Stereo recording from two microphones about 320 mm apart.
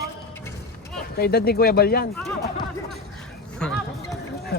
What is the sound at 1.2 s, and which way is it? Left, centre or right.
Speech, left.